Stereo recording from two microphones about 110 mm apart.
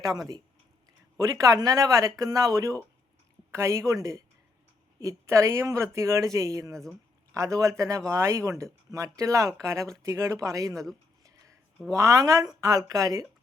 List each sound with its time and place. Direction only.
0.0 s speech: 35° right (ahead or behind)
11.2 s a sound: 30° right (ahead or behind)
11.9 s speech: 30° right (ahead or behind)